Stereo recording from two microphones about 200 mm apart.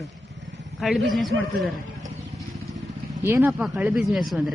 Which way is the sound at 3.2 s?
10° right (ahead or behind).